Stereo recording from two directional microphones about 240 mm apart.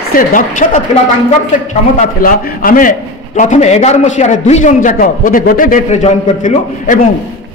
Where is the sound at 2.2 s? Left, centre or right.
Left.